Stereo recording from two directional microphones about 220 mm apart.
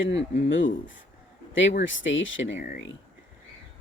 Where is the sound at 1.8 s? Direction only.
60° left (ahead or behind).